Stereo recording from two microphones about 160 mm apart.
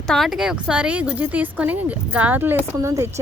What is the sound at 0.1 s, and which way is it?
A woman's voice, centre (ahead or behind).